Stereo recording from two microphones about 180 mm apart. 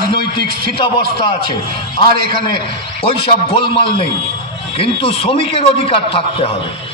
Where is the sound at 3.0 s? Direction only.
30° left (ahead or behind).